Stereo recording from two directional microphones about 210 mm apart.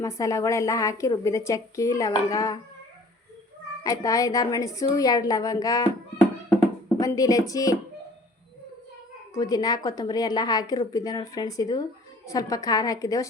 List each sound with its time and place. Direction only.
0.0 s a woman's voice: 15° left (ahead or behind)
3.8 s a woman's voice: 15° left (ahead or behind)
9.3 s a woman's voice: 15° left (ahead or behind)